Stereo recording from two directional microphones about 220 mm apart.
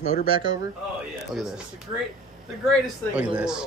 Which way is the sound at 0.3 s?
20° right (ahead or behind).